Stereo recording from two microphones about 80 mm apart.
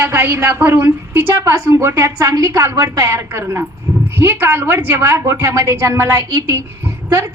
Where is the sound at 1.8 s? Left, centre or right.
Right.